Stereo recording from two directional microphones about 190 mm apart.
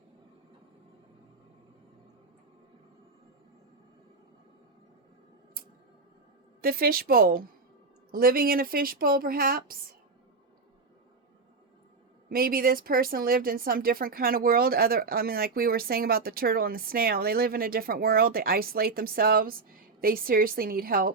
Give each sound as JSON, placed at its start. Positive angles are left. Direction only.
{"t": 6.6, "sound": "speech", "side_deg": -50}
{"t": 12.3, "sound": "speech", "side_deg": -50}